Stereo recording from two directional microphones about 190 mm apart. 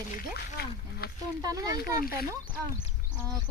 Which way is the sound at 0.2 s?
55° left (ahead or behind).